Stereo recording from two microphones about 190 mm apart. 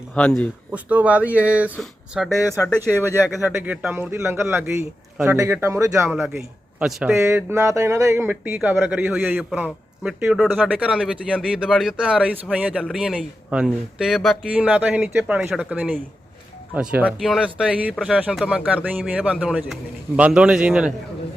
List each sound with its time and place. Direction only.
0.1 s speech: 5° left (ahead or behind)
0.7 s speech: 5° right (ahead or behind)